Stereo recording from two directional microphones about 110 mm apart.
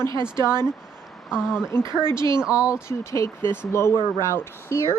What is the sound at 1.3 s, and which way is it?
Speech, 5° right (ahead or behind).